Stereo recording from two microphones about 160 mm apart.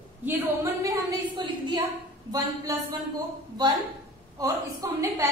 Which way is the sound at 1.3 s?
30° right (ahead or behind).